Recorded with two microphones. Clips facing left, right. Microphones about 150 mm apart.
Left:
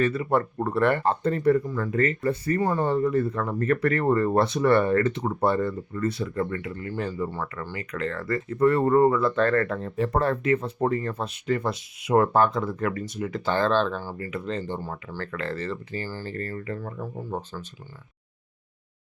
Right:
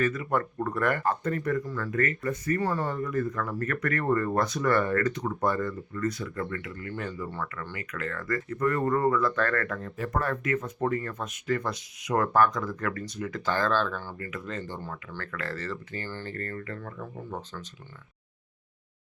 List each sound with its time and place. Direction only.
0.0 s speech: 30° left (ahead or behind)
15.4 s speech: 15° left (ahead or behind)
16.3 s speech: 25° left (ahead or behind)
16.8 s speech: 30° left (ahead or behind)